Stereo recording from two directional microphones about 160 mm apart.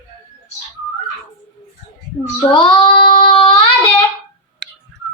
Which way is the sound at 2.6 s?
30° left (ahead or behind).